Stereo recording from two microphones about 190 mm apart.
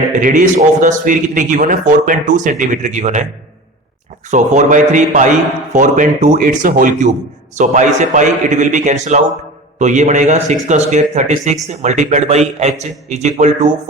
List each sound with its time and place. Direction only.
0.2 s speech: 45° right (ahead or behind)
4.3 s speech: 40° right (ahead or behind)